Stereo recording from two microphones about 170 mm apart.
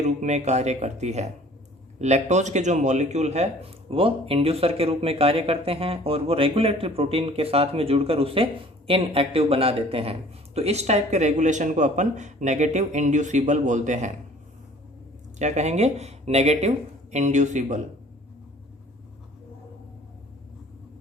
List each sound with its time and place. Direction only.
0.0 s a man's voice: 40° right (ahead or behind)
15.4 s a man's voice: 45° right (ahead or behind)